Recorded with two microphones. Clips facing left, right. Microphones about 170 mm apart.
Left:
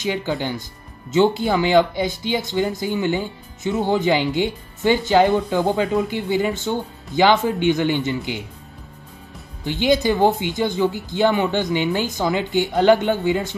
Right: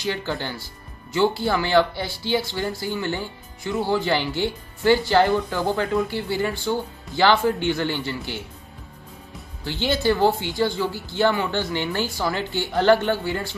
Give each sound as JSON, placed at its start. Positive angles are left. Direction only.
{"t": 0.0, "sound": "speech", "side_deg": 15}
{"t": 9.7, "sound": "speech", "side_deg": 15}